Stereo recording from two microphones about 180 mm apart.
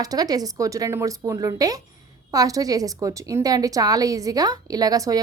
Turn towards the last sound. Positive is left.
turn(degrees=-20)  # may be behind; listen again after turning